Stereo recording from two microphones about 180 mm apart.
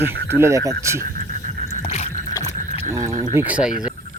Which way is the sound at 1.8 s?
35° left (ahead or behind).